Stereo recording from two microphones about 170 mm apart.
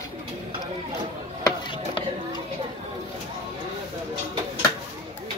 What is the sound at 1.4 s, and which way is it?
Chop, 30° left (ahead or behind).